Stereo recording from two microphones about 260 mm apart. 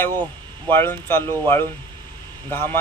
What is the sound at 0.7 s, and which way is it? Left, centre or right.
Speech, centre.